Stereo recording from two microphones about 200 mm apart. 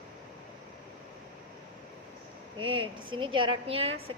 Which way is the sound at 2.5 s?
25° right (ahead or behind).